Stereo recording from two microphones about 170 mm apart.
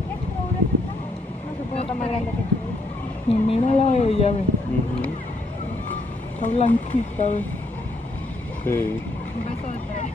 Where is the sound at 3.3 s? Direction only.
35° left (ahead or behind).